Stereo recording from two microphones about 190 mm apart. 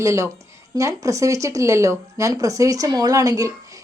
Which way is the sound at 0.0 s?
15° right (ahead or behind).